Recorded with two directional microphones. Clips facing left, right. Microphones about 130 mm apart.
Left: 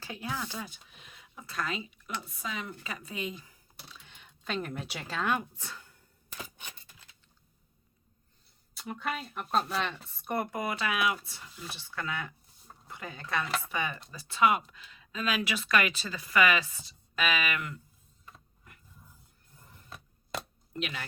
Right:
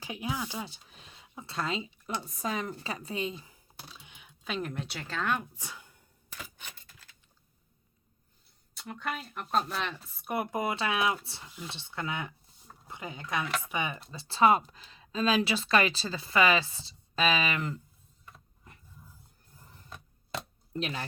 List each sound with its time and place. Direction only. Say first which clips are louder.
0.0 s speech: right 2 dB; 15° right (ahead or behind)
0.6 s speech: right 2 dB; 35° right (ahead or behind)
2.2 s a woman's voice: right 5 dB; 40° right (ahead or behind)
4.0 s speech: left 2 dB; 10° right (ahead or behind)
5.5 s speech: even; 15° right (ahead or behind)
8.7 s speech: left 1 dB; 5° left (ahead or behind)
10.5 s speech: right 2 dB; 25° right (ahead or behind)
14.1 s speech: right 3 dB; 30° right (ahead or behind)
20.7 s a woman's voice: right 3 dB; 30° right (ahead or behind)